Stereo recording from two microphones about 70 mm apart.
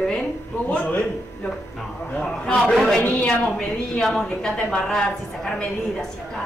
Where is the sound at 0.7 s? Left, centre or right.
Centre.